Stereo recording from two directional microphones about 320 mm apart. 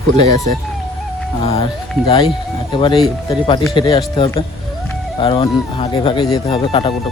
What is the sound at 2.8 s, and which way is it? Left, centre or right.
Speech, centre.